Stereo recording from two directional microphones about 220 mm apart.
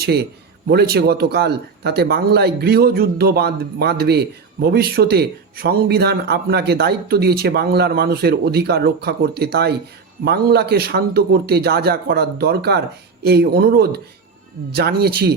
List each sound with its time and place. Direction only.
0.7 s speech: 45° right (ahead or behind)